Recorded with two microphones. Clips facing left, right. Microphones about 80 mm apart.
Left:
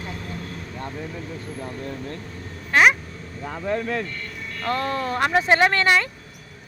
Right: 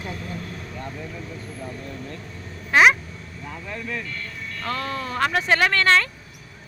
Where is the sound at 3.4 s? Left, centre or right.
Left.